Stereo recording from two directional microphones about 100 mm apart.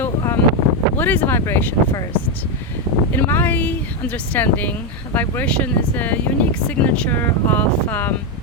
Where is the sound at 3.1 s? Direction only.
20° left (ahead or behind).